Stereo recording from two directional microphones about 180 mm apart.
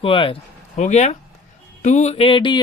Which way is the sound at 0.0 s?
30° left (ahead or behind).